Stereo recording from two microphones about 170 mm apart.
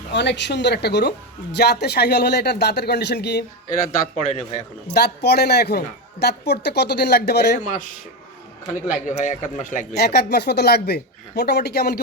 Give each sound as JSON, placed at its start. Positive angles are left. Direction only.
{"t": 0.1, "sound": "a woman's voice", "side_deg": 90}
{"t": 4.3, "sound": "a man's voice", "side_deg": 40}
{"t": 4.9, "sound": "a woman's voice", "side_deg": 70}
{"t": 8.9, "sound": "a man's voice", "side_deg": 45}
{"t": 9.9, "sound": "a woman's voice", "side_deg": 70}